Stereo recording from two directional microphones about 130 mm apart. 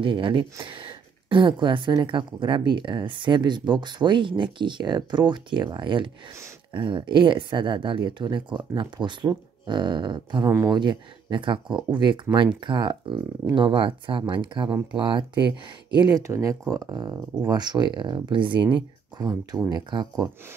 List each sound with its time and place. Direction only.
0.0 s speech: 40° right (ahead or behind)